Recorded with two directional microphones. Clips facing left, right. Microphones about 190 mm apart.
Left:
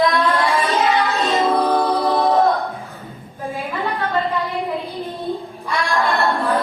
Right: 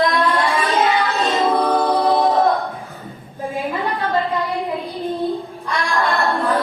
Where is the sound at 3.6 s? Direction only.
15° right (ahead or behind).